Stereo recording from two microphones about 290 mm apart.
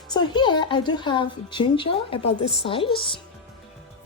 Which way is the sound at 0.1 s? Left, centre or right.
Centre.